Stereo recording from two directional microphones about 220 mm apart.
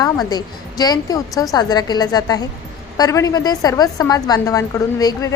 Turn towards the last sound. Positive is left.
turn(degrees=15)  # may be behind; listen again after turning